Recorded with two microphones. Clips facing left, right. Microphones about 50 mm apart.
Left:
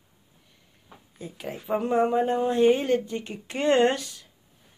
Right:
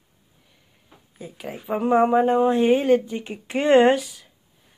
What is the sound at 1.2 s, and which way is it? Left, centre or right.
Speech, centre.